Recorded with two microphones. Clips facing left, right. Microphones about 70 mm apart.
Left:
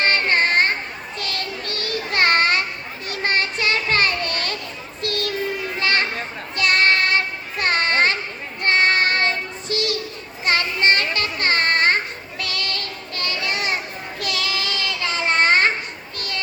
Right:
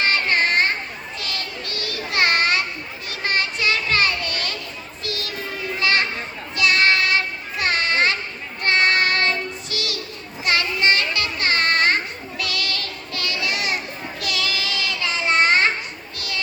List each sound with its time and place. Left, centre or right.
0.0 s a sound: left
3.1 s children playing: left
5.0 s child singing: left
5.8 s children playing: left
6.6 s child singing: left
7.6 s a sound: left
8.6 s child singing: left
10.4 s children playing: left
12.4 s child singing: left
16.1 s children playing: left